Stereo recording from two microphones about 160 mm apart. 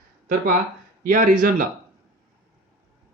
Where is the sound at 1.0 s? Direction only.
60° right (ahead or behind).